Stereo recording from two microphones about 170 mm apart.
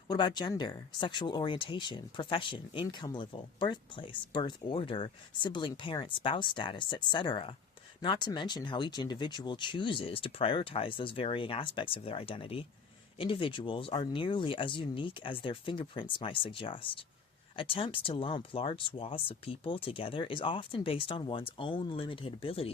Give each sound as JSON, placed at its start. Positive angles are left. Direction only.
{"t": 0.1, "sound": "speech", "side_deg": 25}